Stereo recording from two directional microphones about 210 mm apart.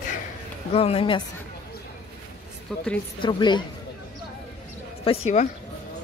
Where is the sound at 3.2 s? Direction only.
20° left (ahead or behind).